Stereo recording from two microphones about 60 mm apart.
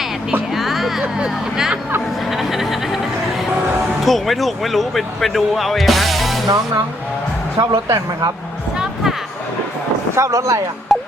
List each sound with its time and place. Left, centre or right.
0.5 s music: centre
1.0 s speech: centre
2.3 s music: centre
4.0 s speech: centre
7.6 s speech: right
10.2 s speech: right
10.9 s a sound: centre